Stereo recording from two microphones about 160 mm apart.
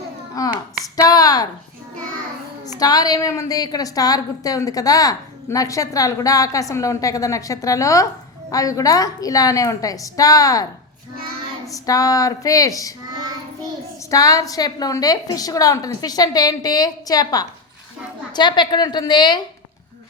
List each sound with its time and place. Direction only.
0.4 s hands: 20° left (ahead or behind)
1.0 s a sound: 25° left (ahead or behind)
2.7 s a woman's voice: 25° left (ahead or behind)
11.7 s a woman's voice: 20° left (ahead or behind)
14.1 s a woman's voice: 20° left (ahead or behind)